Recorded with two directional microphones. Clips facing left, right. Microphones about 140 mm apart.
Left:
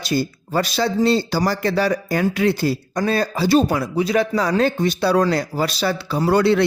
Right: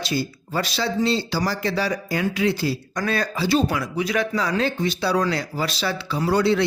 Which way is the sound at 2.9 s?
30° left (ahead or behind).